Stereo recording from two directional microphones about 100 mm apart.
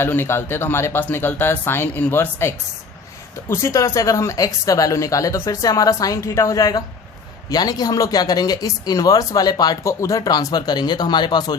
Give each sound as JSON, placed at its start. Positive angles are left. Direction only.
{"t": 0.0, "sound": "speech", "side_deg": 25}